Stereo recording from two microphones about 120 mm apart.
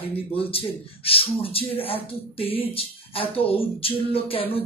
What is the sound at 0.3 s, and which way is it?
Speech, 50° left (ahead or behind).